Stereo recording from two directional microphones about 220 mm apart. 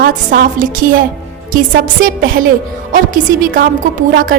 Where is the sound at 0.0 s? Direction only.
40° right (ahead or behind).